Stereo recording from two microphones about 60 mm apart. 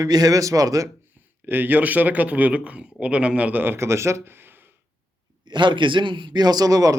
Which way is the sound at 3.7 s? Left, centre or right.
Right.